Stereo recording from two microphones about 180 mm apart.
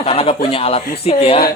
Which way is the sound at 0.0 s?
30° left (ahead or behind).